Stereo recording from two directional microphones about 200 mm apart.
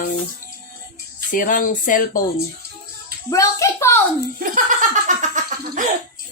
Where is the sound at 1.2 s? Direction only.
40° left (ahead or behind).